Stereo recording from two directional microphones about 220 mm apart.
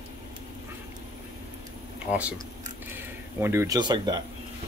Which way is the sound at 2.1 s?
5° right (ahead or behind).